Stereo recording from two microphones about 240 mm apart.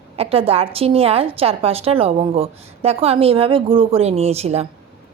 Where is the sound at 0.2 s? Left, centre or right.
Right.